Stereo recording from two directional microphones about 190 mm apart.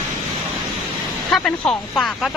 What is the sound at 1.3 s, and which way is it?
Speech, 5° left (ahead or behind).